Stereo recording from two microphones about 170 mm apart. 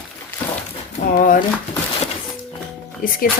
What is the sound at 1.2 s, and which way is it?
Speech, 50° left (ahead or behind).